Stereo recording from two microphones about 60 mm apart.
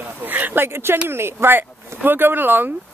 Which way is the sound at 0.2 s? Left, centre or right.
Right.